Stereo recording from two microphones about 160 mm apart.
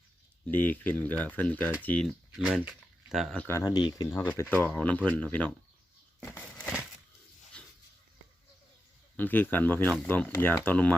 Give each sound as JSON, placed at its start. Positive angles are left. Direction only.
{"t": 0.4, "sound": "speech", "side_deg": 10}
{"t": 3.4, "sound": "speech", "side_deg": 20}
{"t": 4.2, "sound": "speech", "side_deg": 10}
{"t": 7.5, "sound": "dog", "side_deg": 5}
{"t": 9.1, "sound": "speech", "side_deg": 10}